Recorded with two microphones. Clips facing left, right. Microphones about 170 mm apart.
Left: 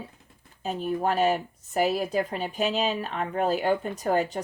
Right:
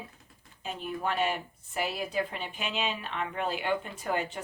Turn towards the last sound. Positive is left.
turn(degrees=40)  # may be behind; listen again after turning